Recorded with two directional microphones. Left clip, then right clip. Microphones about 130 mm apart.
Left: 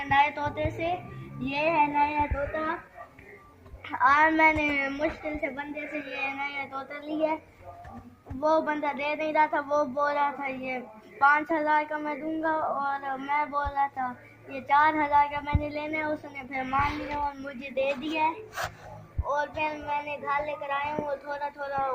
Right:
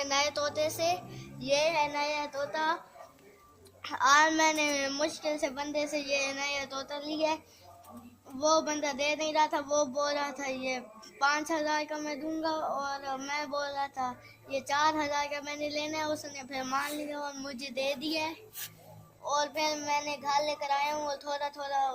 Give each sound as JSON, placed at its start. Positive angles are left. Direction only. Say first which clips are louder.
{"t": 0.0, "sound": "music", "louder": "left 7 dB", "side_deg": -35}
{"t": 0.5, "sound": "child singing", "louder": "even", "side_deg": -45}
{"t": 1.4, "sound": "child singing", "louder": "left 3 dB", "side_deg": -55}
{"t": 2.5, "sound": "speech", "louder": "even", "side_deg": -25}
{"t": 3.8, "sound": "speech", "louder": "left 3 dB", "side_deg": -20}
{"t": 8.4, "sound": "speech", "louder": "left 3 dB", "side_deg": -20}
{"t": 17.2, "sound": "child singing", "louder": "left 5 dB", "side_deg": -35}